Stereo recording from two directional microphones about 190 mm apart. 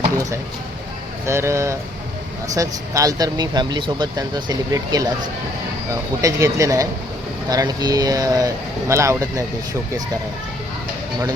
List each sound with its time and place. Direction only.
1.3 s speech: 15° right (ahead or behind)